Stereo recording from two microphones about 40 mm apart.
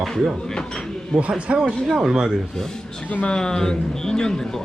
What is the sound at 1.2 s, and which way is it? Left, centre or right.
Speech, right.